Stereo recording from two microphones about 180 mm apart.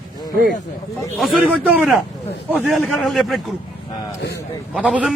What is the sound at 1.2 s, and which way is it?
A man's voice, 5° right (ahead or behind).